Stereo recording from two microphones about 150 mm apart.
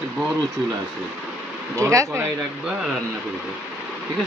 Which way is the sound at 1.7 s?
20° right (ahead or behind).